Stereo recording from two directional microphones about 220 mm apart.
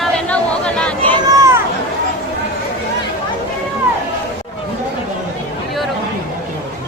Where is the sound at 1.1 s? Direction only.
15° right (ahead or behind).